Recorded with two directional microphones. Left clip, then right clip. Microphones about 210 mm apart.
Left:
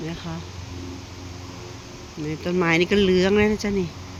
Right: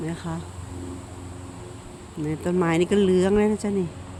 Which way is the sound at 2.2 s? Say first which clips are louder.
Right 1 dB; 25° right (ahead or behind).